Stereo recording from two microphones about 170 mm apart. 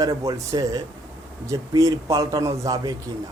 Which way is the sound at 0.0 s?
20° right (ahead or behind).